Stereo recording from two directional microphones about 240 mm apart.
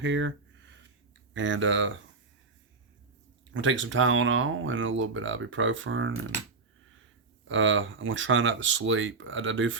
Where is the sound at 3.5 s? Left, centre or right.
Right.